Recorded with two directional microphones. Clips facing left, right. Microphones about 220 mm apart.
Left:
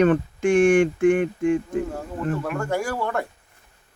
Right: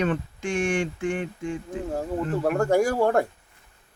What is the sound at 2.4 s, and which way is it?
Speech, 40° right (ahead or behind).